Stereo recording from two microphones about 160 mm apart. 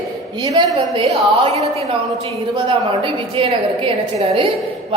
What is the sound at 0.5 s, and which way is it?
A woman's voice, 35° right (ahead or behind).